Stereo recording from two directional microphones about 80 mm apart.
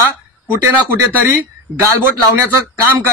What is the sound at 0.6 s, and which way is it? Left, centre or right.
Speech, right.